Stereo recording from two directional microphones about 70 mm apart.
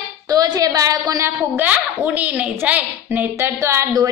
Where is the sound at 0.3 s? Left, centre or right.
Right.